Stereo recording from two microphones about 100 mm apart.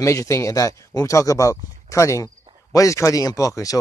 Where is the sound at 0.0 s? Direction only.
30° left (ahead or behind).